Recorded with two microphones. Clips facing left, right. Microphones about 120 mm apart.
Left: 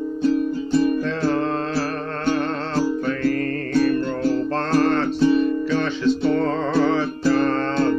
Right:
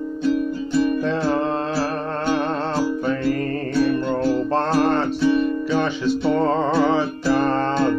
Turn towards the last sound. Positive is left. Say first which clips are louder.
# right 1 dB
turn(degrees=-10)  # may be behind; listen again after turning